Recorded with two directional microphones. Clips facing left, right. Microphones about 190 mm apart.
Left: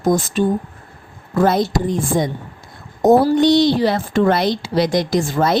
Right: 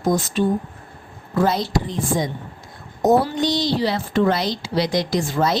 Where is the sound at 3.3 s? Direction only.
60° left (ahead or behind).